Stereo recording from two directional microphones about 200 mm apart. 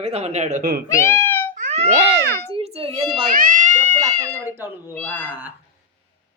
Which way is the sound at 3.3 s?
40° right (ahead or behind).